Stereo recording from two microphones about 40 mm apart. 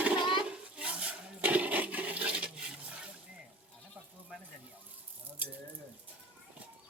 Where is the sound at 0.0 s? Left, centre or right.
Right.